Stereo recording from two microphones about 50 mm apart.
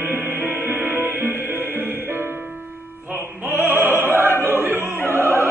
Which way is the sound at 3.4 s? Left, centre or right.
Right.